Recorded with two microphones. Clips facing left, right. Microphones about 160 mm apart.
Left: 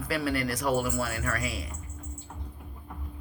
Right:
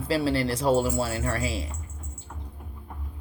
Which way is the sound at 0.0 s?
25° right (ahead or behind).